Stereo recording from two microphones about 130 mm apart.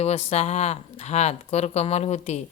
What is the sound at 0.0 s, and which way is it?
Speech, 55° left (ahead or behind).